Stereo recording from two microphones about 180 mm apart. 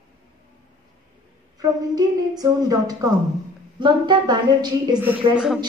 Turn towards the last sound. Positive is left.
turn(degrees=-5)  # may be behind; listen again after turning